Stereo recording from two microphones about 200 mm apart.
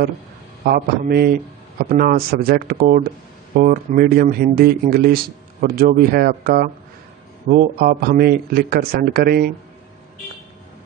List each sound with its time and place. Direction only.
0.7 s speech: 55° right (ahead or behind)